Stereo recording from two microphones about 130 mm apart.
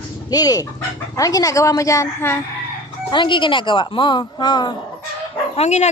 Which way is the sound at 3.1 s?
40° left (ahead or behind).